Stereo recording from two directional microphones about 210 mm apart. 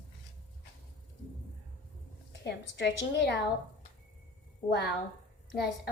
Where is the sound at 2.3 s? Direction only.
55° left (ahead or behind).